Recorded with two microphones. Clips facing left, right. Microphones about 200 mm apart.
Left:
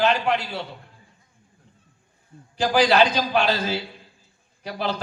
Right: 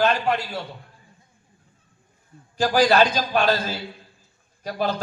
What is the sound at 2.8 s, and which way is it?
A man's voice, 45° right (ahead or behind).